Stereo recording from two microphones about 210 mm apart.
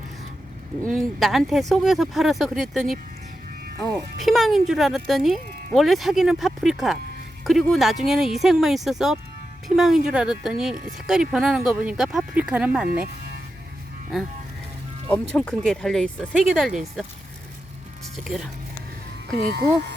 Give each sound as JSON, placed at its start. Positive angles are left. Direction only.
{"t": 0.9, "sound": "speech", "side_deg": 0}
{"t": 4.2, "sound": "speech", "side_deg": 0}
{"t": 15.1, "sound": "speech", "side_deg": 5}
{"t": 18.2, "sound": "speech", "side_deg": 0}
{"t": 19.3, "sound": "speech", "side_deg": -50}